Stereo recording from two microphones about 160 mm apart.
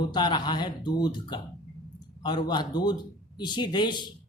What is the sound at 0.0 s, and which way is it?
Speech, 25° left (ahead or behind).